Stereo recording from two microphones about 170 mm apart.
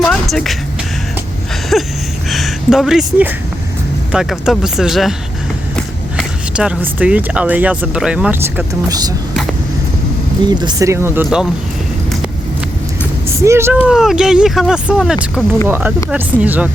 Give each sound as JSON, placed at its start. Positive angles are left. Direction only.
{"t": 0.0, "sound": "music", "side_deg": 5}
{"t": 1.7, "sound": "a sound", "side_deg": 0}
{"t": 2.3, "sound": "speech", "side_deg": 0}
{"t": 6.5, "sound": "speech", "side_deg": -5}
{"t": 8.9, "sound": "speech", "side_deg": -25}
{"t": 10.5, "sound": "speech", "side_deg": -25}
{"t": 13.2, "sound": "speech", "side_deg": -15}